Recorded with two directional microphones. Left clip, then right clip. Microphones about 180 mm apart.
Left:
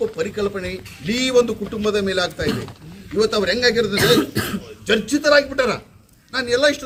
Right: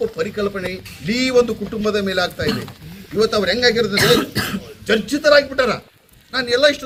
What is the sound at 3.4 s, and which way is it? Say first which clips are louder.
Speech: right 1 dB; 15° left (ahead or behind).